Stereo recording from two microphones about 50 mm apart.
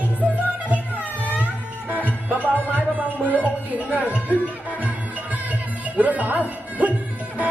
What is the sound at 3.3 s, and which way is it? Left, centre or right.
A man's voice, right.